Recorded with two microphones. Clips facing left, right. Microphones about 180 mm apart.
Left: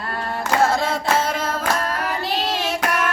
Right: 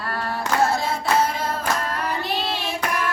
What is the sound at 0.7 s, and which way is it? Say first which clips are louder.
Music: left 2 dB; 90° left.